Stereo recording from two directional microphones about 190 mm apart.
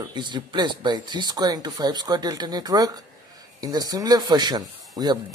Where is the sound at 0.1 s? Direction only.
25° right (ahead or behind).